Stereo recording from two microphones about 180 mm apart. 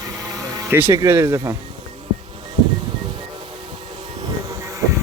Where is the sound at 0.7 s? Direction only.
15° right (ahead or behind).